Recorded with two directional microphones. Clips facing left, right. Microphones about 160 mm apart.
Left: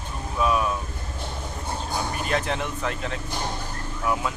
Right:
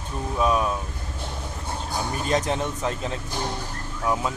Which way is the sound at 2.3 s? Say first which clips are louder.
Right 4 dB; 35° right (ahead or behind).